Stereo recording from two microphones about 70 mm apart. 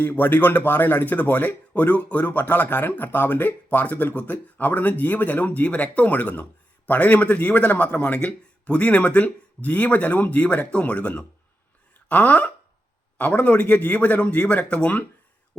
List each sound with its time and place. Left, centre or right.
0.0 s speech: left